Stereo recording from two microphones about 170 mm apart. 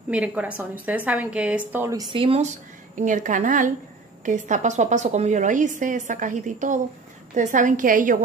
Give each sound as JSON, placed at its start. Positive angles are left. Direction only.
{"t": 0.1, "sound": "a woman's voice", "side_deg": -10}
{"t": 3.0, "sound": "a woman's voice", "side_deg": -50}